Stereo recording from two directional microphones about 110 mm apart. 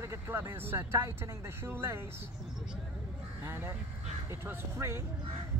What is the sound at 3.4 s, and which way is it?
Crow, 20° right (ahead or behind).